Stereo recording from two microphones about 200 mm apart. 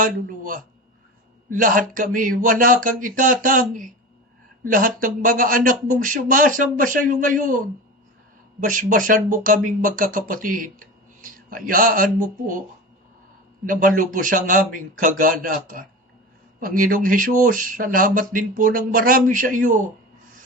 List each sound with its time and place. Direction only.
0.0 s speech: 45° right (ahead or behind)
8.6 s speech: 40° right (ahead or behind)
13.7 s speech: 40° right (ahead or behind)